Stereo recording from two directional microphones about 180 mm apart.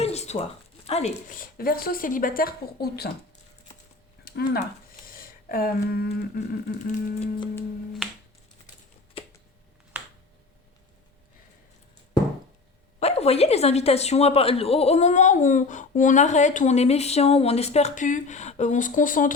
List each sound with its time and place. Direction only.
0.0 s zipper: 35° left (ahead or behind)
0.9 s a woman's voice: 35° left (ahead or behind); by 3.1 s 60° left (ahead or behind)
4.2 s speech: 60° left (ahead or behind)
13.0 s a woman's voice: 35° left (ahead or behind)